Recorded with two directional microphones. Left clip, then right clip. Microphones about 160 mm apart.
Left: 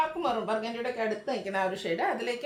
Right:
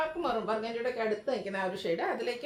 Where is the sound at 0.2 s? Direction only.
15° left (ahead or behind).